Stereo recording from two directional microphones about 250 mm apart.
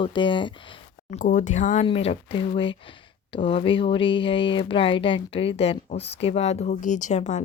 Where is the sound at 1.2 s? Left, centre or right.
Left.